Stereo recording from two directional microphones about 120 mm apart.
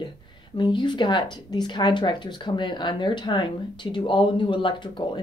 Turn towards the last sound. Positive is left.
turn(degrees=40)  # may be behind; listen again after turning